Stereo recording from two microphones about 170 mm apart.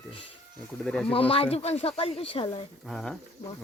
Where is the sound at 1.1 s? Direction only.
35° left (ahead or behind).